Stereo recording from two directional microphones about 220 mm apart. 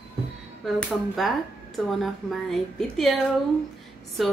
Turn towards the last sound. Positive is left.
turn(degrees=0)  # may be behind; listen again after turning